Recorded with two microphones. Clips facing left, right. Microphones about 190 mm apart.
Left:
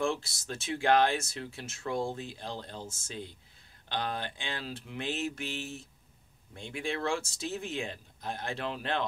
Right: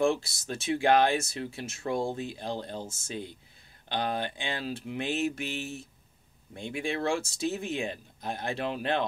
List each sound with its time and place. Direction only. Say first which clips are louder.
0.5 s speech: right 3 dB; 15° right (ahead or behind)